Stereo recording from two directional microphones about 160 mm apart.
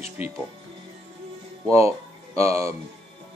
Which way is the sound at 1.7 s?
15° right (ahead or behind).